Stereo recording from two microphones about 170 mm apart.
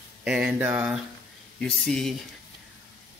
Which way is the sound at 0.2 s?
5° right (ahead or behind).